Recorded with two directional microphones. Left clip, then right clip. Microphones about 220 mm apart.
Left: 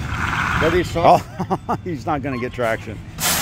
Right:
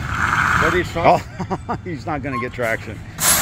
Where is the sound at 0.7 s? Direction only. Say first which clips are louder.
Even; 55° left (ahead or behind).